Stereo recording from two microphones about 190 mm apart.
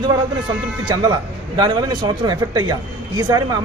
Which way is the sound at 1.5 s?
25° right (ahead or behind).